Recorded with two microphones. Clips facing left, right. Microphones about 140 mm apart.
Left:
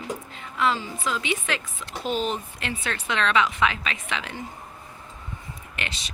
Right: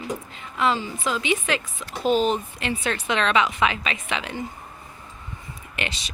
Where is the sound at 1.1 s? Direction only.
5° right (ahead or behind).